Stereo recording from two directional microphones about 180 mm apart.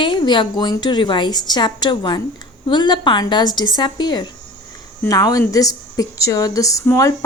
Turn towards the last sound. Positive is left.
turn(degrees=15)  # may be behind; listen again after turning